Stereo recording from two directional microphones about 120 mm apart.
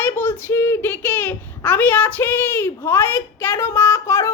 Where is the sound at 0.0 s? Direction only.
20° left (ahead or behind).